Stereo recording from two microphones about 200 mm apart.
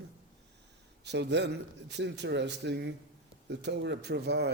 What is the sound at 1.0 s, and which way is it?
Speech, 60° right (ahead or behind).